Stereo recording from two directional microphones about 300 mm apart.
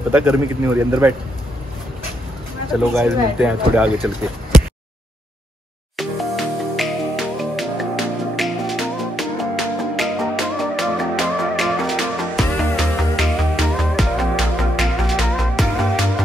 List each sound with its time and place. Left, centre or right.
0.1 s a man's voice: centre
2.7 s speech: centre
5.9 s music: centre